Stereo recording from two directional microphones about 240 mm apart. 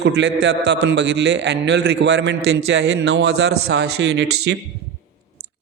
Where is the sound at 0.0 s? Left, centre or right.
Right.